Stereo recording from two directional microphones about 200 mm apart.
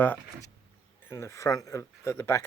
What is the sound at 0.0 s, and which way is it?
Speech, 10° left (ahead or behind).